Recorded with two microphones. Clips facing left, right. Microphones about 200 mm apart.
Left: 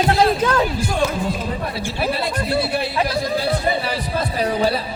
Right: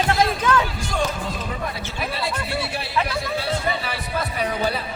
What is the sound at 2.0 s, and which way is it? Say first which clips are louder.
A man's voice: left 5 dB; 35° left (ahead or behind).